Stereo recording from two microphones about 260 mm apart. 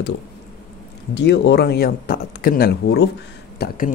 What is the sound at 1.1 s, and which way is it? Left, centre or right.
Speech, left.